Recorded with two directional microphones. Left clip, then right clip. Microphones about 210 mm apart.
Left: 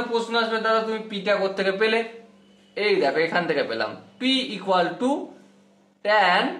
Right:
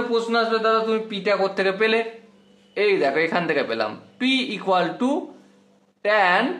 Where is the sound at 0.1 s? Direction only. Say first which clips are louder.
Right 3 dB; 40° right (ahead or behind).